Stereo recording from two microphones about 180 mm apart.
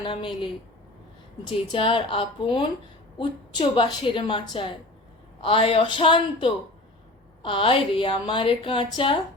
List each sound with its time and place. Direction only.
0.0 s a woman's voice: 30° left (ahead or behind)
1.7 s a woman's voice: 30° left (ahead or behind)